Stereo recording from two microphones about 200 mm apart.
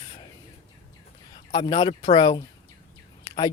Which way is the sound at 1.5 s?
20° left (ahead or behind).